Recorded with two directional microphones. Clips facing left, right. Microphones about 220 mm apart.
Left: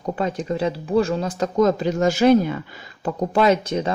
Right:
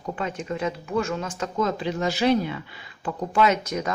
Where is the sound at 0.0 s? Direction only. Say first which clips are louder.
Left 6 dB; 35° left (ahead or behind).